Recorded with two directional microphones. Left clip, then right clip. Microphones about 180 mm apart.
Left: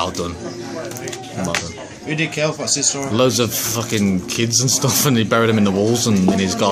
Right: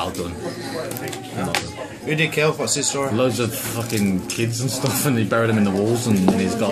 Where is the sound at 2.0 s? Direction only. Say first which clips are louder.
Right 1 dB; centre (ahead or behind).